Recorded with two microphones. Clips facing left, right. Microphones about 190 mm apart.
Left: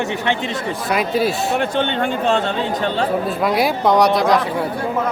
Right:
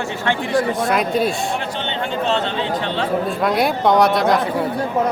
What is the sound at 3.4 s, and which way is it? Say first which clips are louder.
Speech: even; centre (ahead or behind).